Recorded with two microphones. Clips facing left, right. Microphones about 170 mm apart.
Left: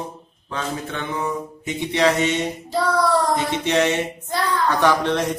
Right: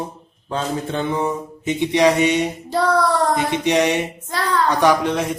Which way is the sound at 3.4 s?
15° right (ahead or behind).